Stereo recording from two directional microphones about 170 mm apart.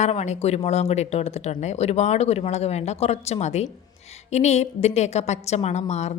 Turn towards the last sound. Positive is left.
turn(degrees=40)  # may be behind; listen again after turning